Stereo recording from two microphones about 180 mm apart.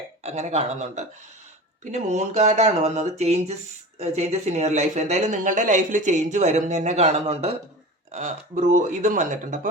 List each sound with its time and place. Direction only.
0.2 s speech: 40° right (ahead or behind)